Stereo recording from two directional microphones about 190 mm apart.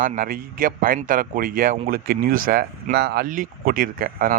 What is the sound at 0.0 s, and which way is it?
Speech, 45° right (ahead or behind).